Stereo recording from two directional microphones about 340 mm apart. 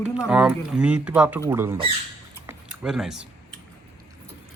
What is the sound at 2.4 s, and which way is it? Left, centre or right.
Typing, centre.